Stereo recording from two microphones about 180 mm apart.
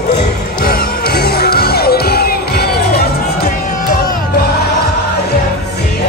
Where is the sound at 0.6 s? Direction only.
60° left (ahead or behind).